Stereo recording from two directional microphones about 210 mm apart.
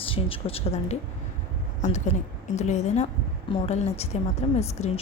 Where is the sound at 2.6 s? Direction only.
35° left (ahead or behind).